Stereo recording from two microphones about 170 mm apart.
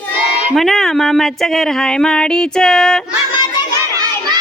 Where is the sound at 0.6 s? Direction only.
Centre (ahead or behind).